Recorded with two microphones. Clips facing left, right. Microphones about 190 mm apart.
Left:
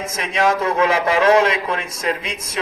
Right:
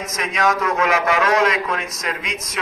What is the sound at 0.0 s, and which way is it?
A man's voice, 30° left (ahead or behind).